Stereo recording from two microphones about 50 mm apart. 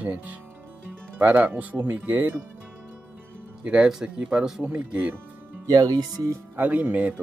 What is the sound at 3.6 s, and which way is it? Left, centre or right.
Speech, centre.